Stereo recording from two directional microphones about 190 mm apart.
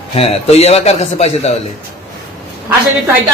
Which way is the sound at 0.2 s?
35° left (ahead or behind).